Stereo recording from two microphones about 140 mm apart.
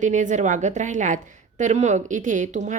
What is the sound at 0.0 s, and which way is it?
A woman's voice, 60° right (ahead or behind).